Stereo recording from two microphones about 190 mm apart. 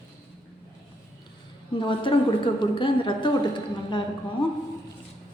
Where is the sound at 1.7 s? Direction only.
25° left (ahead or behind).